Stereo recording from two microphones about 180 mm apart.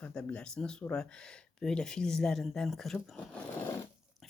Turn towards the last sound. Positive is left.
turn(degrees=5)  # may be behind; listen again after turning